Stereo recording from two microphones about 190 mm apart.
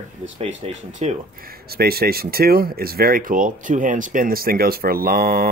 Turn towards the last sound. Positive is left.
turn(degrees=-50)  # may be behind; listen again after turning